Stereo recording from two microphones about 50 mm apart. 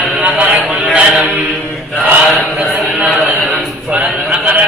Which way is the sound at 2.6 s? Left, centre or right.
Right.